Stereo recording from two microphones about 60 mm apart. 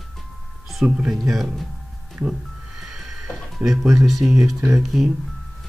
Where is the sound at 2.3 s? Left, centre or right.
Centre.